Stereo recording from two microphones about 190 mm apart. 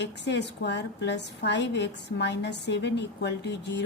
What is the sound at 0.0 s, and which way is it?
A woman's voice, 65° left (ahead or behind).